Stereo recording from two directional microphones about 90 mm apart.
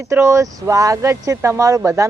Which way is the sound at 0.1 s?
35° right (ahead or behind).